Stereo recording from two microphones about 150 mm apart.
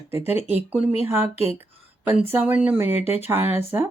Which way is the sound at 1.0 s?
15° right (ahead or behind).